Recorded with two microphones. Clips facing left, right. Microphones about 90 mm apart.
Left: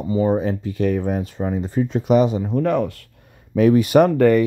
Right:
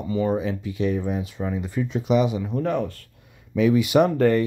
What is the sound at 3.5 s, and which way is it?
Speech, 45° left (ahead or behind).